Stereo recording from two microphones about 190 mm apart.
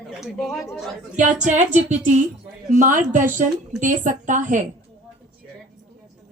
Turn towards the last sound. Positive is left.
turn(degrees=-40)  # may be behind; listen again after turning